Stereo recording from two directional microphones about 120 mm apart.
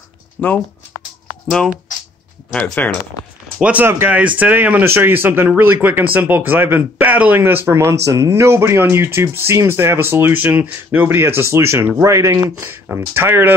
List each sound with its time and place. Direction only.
0.4 s speech: 10° left (ahead or behind)
2.5 s speech: 15° left (ahead or behind)
3.6 s speech: 15° right (ahead or behind)